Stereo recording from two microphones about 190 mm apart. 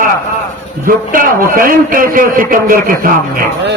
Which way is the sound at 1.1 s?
45° right (ahead or behind).